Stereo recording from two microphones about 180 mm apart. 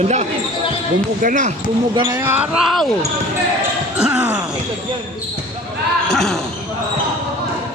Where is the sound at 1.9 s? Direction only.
20° right (ahead or behind); by 2.9 s centre (ahead or behind).